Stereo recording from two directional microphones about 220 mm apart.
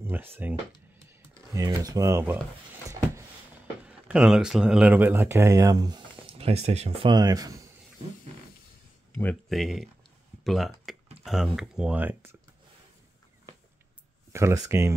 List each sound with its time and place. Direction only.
0.1 s speech: 10° right (ahead or behind)
1.5 s speech: 15° right (ahead or behind)
3.8 s speech: 5° right (ahead or behind)
9.1 s speech: 5° left (ahead or behind)
14.3 s speech: 10° right (ahead or behind)